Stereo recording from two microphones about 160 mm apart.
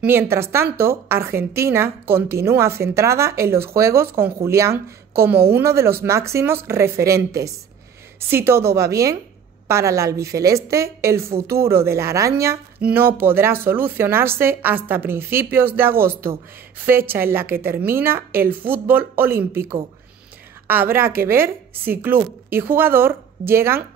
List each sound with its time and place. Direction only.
0.0 s a woman's voice: 15° right (ahead or behind)